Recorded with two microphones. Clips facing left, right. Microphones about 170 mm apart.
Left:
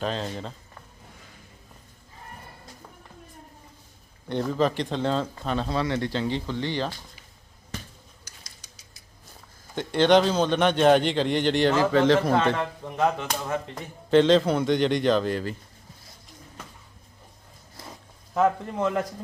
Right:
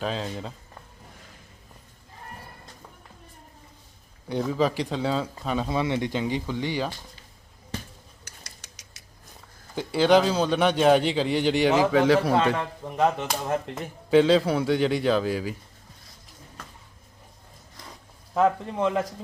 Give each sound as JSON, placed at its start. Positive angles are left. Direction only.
{"t": 0.0, "sound": "a man's voice", "side_deg": -5}
{"t": 4.3, "sound": "a man's voice", "side_deg": -5}
{"t": 8.2, "sound": "rodents", "side_deg": -70}
{"t": 9.7, "sound": "a man's voice", "side_deg": -5}
{"t": 18.3, "sound": "a man's voice", "side_deg": 0}